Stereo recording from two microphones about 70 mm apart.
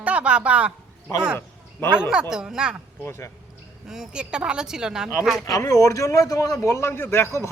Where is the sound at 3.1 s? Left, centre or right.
Left.